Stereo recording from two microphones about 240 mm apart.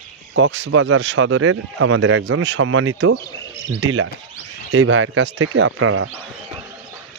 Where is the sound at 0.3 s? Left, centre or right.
Right.